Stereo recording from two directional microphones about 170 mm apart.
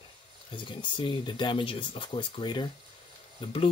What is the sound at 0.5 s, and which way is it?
Speech, 30° left (ahead or behind).